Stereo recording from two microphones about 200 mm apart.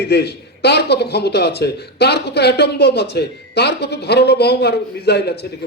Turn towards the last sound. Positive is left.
turn(degrees=55)  # may be behind; listen again after turning